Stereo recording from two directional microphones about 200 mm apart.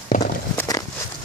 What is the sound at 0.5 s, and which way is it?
Walk, 15° left (ahead or behind).